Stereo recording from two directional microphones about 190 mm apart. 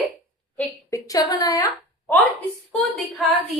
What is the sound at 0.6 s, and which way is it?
A woman's voice, 15° left (ahead or behind).